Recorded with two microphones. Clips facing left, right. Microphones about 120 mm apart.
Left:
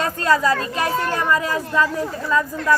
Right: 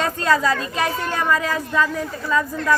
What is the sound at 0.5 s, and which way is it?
A child's voice, 40° left (ahead or behind).